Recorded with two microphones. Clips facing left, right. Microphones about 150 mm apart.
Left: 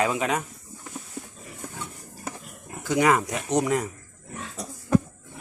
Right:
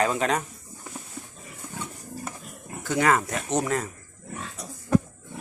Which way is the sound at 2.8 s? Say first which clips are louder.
Left 1 dB; 15° left (ahead or behind).